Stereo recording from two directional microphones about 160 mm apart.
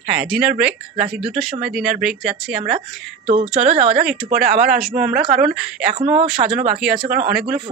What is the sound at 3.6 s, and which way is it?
Speech, 40° right (ahead or behind).